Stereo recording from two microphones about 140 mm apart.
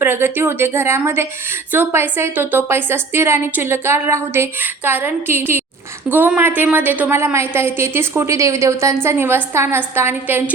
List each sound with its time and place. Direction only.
0.0 s a woman's voice: 15° right (ahead or behind)